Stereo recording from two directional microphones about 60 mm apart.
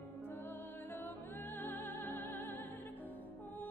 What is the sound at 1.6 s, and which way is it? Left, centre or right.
Music, left.